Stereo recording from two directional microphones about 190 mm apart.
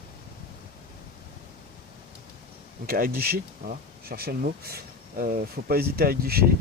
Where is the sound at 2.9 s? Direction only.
50° right (ahead or behind).